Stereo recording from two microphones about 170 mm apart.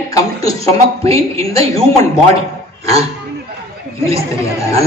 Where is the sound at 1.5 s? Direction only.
20° left (ahead or behind).